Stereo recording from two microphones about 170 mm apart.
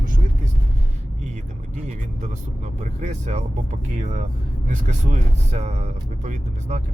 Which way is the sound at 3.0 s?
40° right (ahead or behind).